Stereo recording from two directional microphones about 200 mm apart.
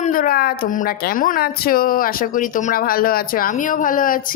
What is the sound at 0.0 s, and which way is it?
Speech, 45° left (ahead or behind).